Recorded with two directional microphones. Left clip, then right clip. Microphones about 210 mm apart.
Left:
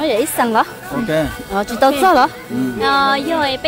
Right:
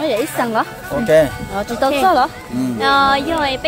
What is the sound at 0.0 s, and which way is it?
Speech, 45° left (ahead or behind).